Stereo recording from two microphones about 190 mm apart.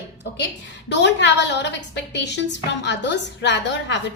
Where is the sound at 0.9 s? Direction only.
65° left (ahead or behind).